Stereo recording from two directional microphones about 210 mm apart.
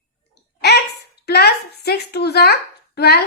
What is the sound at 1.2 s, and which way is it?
A woman's voice, 50° left (ahead or behind).